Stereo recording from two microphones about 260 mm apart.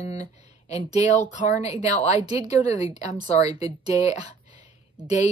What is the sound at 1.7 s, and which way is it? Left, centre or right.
Speech, centre.